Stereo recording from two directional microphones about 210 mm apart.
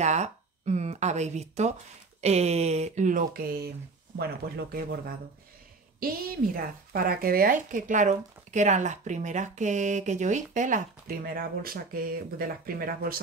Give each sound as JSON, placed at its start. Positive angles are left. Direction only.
{"t": 0.0, "sound": "a woman's voice", "side_deg": -35}